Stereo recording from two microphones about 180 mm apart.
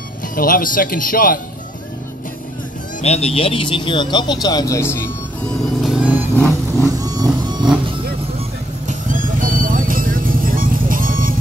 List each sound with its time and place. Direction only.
0.4 s speech: 50° left (ahead or behind)
3.0 s speech: 35° left (ahead or behind); by 5.1 s 15° left (ahead or behind)
5.8 s vehicle: 5° right (ahead or behind); by 7.6 s 20° right (ahead or behind)
8.8 s vehicle: 45° right (ahead or behind)